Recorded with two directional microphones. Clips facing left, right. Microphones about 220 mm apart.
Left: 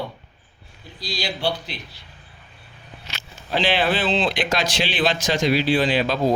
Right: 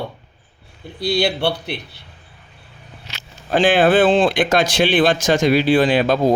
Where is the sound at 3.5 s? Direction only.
50° right (ahead or behind).